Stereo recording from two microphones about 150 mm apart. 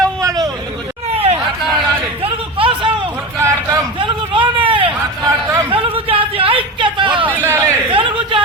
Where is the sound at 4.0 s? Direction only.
35° right (ahead or behind).